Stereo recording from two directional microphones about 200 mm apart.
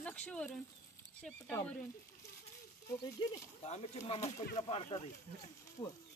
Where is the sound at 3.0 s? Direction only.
20° left (ahead or behind).